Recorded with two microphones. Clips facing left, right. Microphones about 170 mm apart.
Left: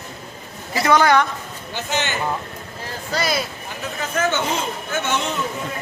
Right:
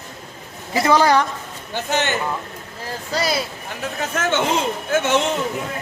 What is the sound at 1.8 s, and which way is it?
Speech, 55° right (ahead or behind).